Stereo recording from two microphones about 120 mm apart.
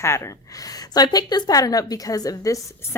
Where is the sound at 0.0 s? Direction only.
20° left (ahead or behind).